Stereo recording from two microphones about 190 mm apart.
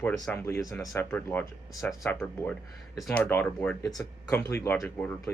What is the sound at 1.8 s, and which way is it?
Speech, centre (ahead or behind).